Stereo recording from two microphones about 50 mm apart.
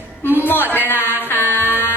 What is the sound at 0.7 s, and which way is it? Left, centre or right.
Music, left.